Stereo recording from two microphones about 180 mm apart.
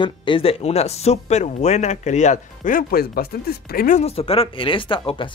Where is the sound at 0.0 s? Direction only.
25° left (ahead or behind); by 4.0 s 55° left (ahead or behind).